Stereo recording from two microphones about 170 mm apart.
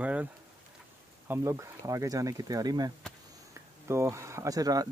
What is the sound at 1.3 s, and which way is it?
Speech, 15° right (ahead or behind).